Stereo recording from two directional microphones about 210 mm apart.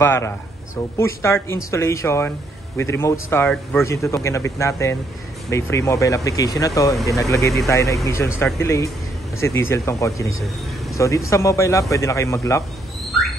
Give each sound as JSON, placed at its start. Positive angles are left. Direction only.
{"t": 0.0, "sound": "speech", "side_deg": 10}